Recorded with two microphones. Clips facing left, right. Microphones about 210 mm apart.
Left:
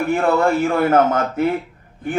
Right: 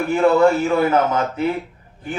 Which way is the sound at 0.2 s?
50° left (ahead or behind).